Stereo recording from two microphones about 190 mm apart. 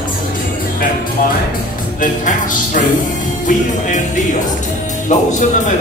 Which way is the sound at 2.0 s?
45° left (ahead or behind).